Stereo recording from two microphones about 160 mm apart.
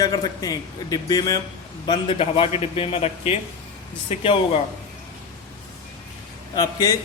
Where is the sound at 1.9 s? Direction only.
35° left (ahead or behind).